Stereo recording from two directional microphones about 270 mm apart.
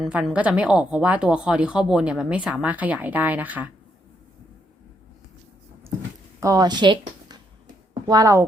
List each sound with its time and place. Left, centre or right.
0.0 s a woman's voice: centre
6.4 s a woman's voice: centre